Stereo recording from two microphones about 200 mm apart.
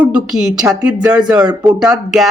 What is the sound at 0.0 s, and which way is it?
Speech, 5° right (ahead or behind).